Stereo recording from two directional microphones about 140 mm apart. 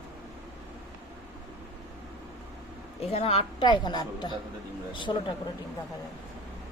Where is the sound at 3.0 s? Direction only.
45° left (ahead or behind); by 4.3 s 30° left (ahead or behind).